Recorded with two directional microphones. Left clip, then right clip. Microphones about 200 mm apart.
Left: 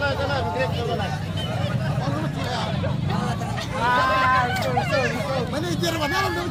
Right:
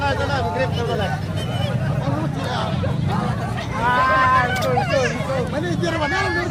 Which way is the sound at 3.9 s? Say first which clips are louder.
Right 3 dB; 50° left (ahead or behind).